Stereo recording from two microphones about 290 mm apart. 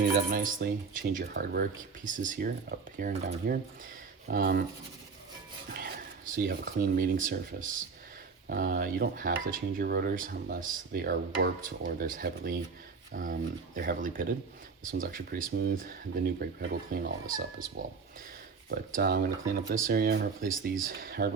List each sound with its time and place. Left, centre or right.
0.0 s speech: right
5.7 s speech: right
18.7 s speech: right